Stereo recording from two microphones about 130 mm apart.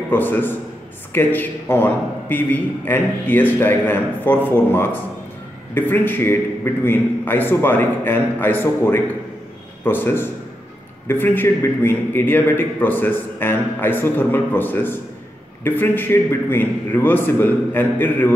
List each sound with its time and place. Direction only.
0.1 s a man's voice: 15° left (ahead or behind)